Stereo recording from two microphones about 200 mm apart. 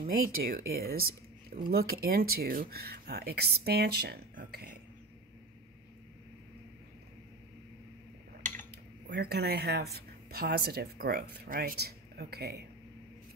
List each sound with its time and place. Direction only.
0.0 s speech: 50° right (ahead or behind)
8.4 s a sound: 40° right (ahead or behind)
9.1 s speech: 55° right (ahead or behind)